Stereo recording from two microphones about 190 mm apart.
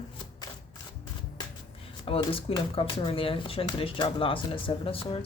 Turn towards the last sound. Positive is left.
turn(degrees=30)  # may be behind; listen again after turning